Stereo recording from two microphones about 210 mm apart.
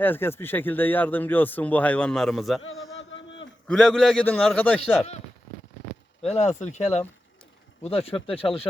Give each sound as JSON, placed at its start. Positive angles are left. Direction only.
{"t": 0.0, "sound": "speech", "side_deg": 10}
{"t": 2.6, "sound": "a man's voice", "side_deg": 70}
{"t": 3.7, "sound": "a man's voice", "side_deg": 0}
{"t": 6.2, "sound": "speech", "side_deg": 30}